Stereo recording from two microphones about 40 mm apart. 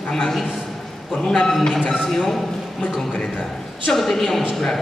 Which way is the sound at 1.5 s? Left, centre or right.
Centre.